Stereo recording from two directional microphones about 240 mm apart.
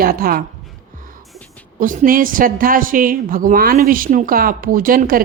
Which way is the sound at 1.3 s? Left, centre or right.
Centre.